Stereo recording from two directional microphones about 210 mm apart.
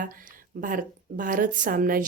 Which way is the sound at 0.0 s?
40° right (ahead or behind).